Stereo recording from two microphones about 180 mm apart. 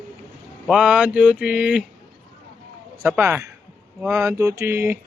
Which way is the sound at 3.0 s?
15° right (ahead or behind).